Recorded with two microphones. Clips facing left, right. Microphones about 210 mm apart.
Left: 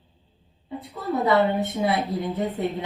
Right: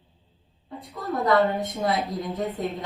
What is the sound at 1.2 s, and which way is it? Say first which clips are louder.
Speech: left 1 dB; 5° left (ahead or behind).